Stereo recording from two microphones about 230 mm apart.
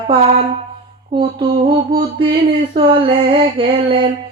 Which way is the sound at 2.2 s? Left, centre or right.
Right.